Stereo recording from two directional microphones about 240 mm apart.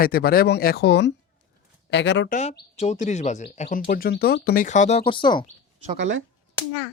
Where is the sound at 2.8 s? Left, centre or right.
Left.